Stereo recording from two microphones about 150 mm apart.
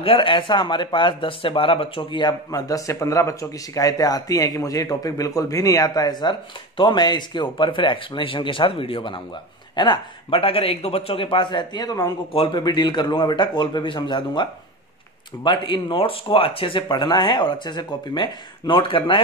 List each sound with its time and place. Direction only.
0.0 s speech: 35° left (ahead or behind)